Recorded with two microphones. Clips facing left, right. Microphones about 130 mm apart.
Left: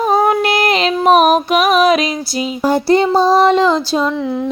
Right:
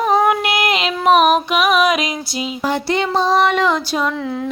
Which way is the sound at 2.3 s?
40° left (ahead or behind).